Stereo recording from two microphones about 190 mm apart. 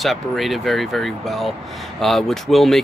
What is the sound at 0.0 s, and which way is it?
Speech, centre (ahead or behind).